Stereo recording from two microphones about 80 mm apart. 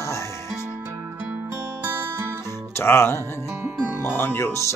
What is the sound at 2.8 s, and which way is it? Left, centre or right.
Music, left.